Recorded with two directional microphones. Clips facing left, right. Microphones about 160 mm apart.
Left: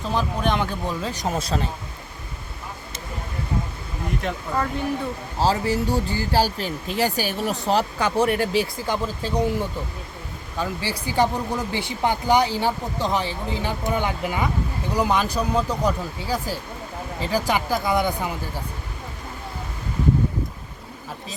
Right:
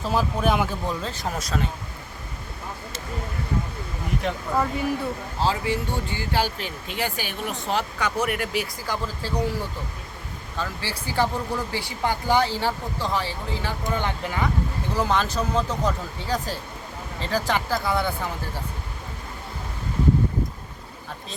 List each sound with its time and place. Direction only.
0.0 s speech: 5° right (ahead or behind)
1.0 s speech: 15° left (ahead or behind)
4.2 s speech: 5° right (ahead or behind)
5.4 s speech: 40° left (ahead or behind); by 18.3 s 15° left (ahead or behind)